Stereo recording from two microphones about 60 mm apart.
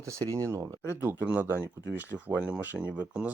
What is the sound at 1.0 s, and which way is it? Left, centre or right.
Speech, right.